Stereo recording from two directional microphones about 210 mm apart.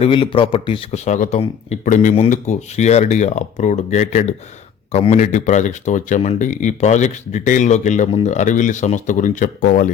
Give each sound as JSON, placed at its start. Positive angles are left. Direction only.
{"t": 0.0, "sound": "speech", "side_deg": 25}